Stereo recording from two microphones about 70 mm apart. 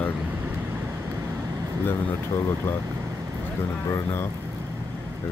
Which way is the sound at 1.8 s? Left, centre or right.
Left.